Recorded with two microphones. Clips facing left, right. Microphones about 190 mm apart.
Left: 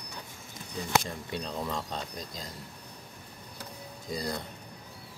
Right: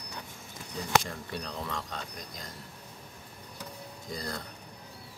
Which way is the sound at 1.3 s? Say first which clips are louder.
Left 4 dB; 20° left (ahead or behind).